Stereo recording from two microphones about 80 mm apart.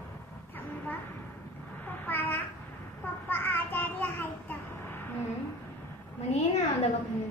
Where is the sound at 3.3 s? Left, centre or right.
Left.